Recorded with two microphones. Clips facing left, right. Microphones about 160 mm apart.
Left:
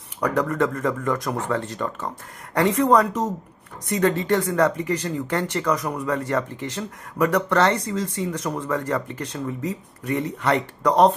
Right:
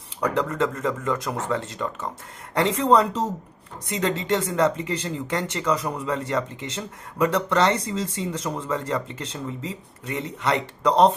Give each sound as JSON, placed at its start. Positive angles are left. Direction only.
{"t": 0.3, "sound": "speech", "side_deg": -25}